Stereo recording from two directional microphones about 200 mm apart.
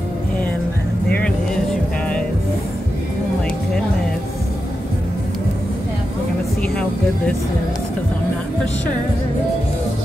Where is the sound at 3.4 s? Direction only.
5° left (ahead or behind).